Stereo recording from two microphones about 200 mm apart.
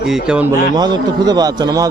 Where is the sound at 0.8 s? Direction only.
20° right (ahead or behind).